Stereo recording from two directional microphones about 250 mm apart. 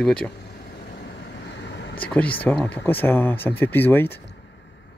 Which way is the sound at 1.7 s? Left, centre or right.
Left.